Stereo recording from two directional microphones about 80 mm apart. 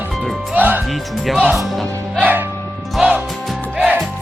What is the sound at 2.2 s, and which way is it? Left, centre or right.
Music, right.